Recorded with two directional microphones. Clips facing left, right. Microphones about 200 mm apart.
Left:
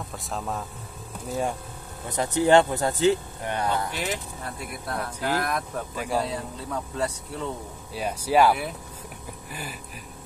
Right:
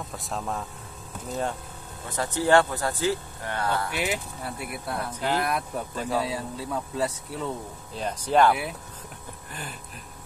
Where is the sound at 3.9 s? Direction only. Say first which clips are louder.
Right 2 dB; 10° right (ahead or behind).